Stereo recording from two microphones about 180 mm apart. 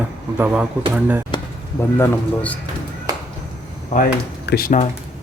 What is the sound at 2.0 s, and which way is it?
Speech, 10° left (ahead or behind).